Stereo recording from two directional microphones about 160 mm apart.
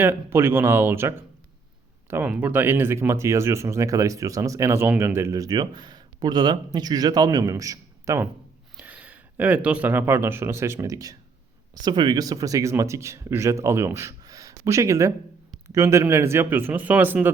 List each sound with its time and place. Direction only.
0.0 s speech: 15° right (ahead or behind)